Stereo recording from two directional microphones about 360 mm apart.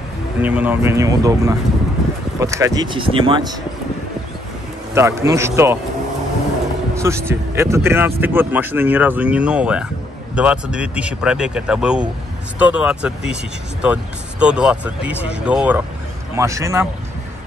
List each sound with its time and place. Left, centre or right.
0.4 s speech: centre
4.9 s speech: centre
7.0 s speech: centre